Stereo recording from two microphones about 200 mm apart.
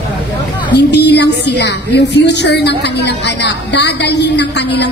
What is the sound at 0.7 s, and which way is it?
Speech, 60° left (ahead or behind).